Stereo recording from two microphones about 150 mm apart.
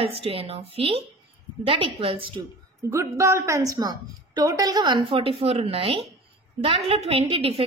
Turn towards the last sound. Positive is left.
turn(degrees=-40)  # may be behind; listen again after turning